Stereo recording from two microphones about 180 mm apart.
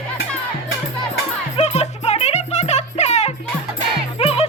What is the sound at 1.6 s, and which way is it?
Music, 35° left (ahead or behind).